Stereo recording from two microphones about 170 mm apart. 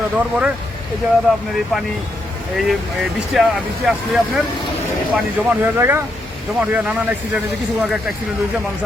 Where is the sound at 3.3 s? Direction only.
Centre (ahead or behind).